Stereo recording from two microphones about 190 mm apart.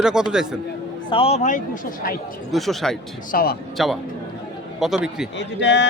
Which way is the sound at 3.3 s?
50° left (ahead or behind).